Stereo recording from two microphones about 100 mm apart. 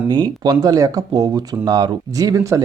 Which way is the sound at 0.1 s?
45° right (ahead or behind).